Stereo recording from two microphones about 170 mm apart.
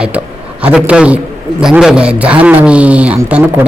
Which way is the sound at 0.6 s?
5° right (ahead or behind).